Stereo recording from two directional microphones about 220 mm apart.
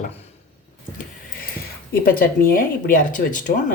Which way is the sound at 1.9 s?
40° left (ahead or behind).